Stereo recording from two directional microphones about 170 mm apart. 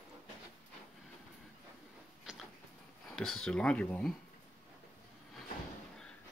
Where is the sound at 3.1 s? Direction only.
5° left (ahead or behind).